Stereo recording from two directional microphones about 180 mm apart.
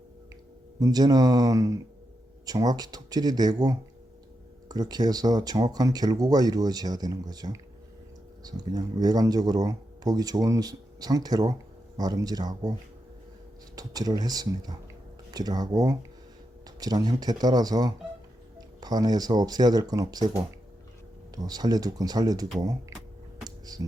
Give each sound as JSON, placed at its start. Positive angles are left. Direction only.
{"t": 0.8, "sound": "speech", "side_deg": -20}
{"t": 13.7, "sound": "speech", "side_deg": -20}
{"t": 21.3, "sound": "speech", "side_deg": -20}
{"t": 23.4, "sound": "music", "side_deg": -20}